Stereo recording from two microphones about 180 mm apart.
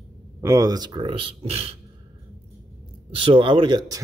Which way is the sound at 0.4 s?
15° right (ahead or behind).